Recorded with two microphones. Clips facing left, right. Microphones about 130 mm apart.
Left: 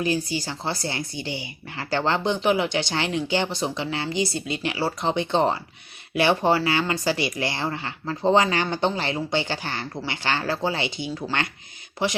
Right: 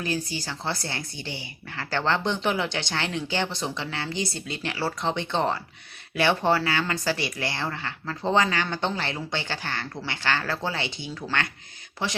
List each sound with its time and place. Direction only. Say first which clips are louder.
0.0 s speech: left 5 dB; 15° left (ahead or behind)